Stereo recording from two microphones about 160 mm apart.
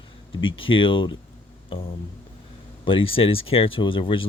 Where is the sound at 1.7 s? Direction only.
35° left (ahead or behind).